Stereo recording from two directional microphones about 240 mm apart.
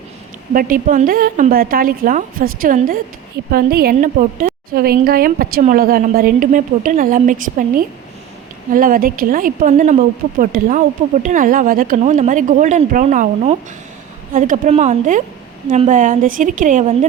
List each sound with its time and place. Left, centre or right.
0.5 s a woman's voice: right
8.7 s a woman's voice: right